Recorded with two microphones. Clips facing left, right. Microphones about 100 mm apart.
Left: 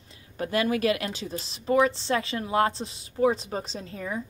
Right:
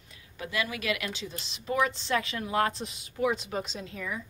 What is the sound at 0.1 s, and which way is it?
Speech, 40° left (ahead or behind).